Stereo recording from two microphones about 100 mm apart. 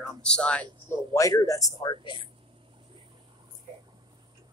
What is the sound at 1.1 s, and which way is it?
Speech, 35° left (ahead or behind).